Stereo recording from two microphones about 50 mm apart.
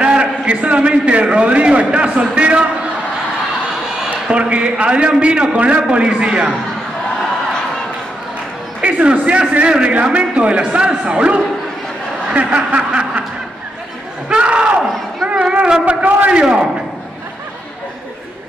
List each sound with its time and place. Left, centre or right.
0.0 s a man's voice: right
4.3 s a man's voice: right
8.8 s a man's voice: right
14.3 s crowd: right
14.8 s crowd: centre
15.2 s a sound: right